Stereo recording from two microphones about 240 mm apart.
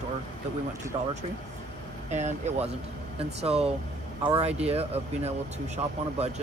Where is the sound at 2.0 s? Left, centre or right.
Right.